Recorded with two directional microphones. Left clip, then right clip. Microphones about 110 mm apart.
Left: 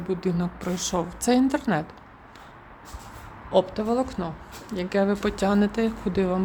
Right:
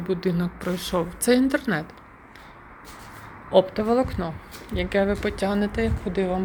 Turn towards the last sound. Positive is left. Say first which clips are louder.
# even
turn(degrees=75)  # may be behind; listen again after turning